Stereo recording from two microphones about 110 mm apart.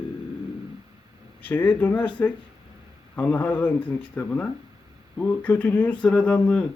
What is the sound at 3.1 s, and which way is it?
Speech, 15° left (ahead or behind).